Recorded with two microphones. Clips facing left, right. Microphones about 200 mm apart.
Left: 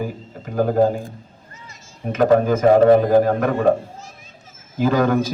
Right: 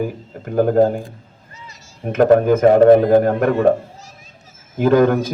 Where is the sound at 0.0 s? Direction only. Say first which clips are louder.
Right 4 dB; 55° right (ahead or behind).